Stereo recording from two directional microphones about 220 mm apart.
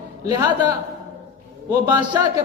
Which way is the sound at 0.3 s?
20° right (ahead or behind).